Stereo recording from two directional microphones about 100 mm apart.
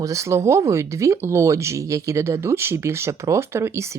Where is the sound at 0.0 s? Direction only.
30° right (ahead or behind).